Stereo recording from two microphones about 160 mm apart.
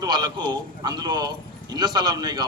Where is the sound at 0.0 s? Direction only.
25° right (ahead or behind).